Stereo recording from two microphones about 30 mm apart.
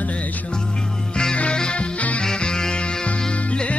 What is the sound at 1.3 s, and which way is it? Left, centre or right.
Music, left.